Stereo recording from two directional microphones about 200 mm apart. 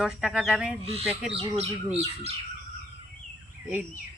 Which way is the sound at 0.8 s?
30° right (ahead or behind).